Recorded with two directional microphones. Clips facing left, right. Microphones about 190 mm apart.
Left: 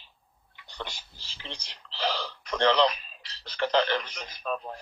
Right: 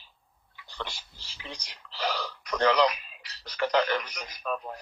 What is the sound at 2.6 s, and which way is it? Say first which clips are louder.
Speech: even; 30° left (ahead or behind).